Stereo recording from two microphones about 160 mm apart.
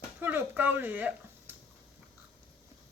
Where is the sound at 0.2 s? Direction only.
10° right (ahead or behind).